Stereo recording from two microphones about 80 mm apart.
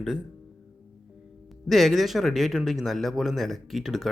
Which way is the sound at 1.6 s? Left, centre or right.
Centre.